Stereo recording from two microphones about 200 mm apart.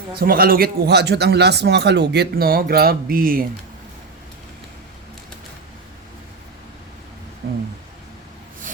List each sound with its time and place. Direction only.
0.2 s a man's voice: 50° right (ahead or behind)